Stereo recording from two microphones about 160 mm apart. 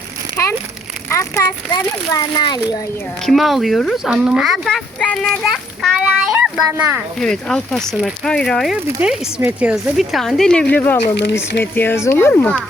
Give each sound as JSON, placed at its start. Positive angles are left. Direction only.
{"t": 1.1, "sound": "a child's voice", "side_deg": 20}
{"t": 3.2, "sound": "speech", "side_deg": 0}
{"t": 7.2, "sound": "speech", "side_deg": 5}